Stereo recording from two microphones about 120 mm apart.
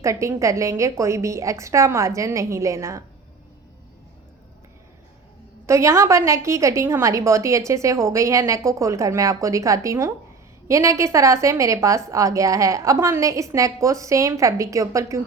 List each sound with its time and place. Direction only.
0.0 s a woman's voice: 25° right (ahead or behind)
5.6 s a woman's voice: 25° right (ahead or behind)